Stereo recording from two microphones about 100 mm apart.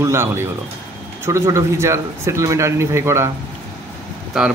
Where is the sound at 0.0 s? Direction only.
25° right (ahead or behind).